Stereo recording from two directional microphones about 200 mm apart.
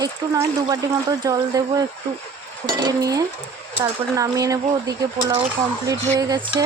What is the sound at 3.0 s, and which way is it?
Speech, 20° right (ahead or behind).